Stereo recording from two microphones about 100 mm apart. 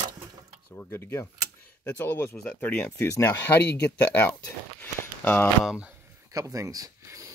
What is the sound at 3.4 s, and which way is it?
Speech, 15° left (ahead or behind).